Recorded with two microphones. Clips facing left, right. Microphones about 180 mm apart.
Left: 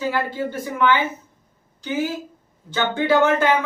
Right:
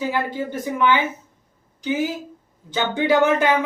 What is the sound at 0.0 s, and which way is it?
Speech, 15° right (ahead or behind).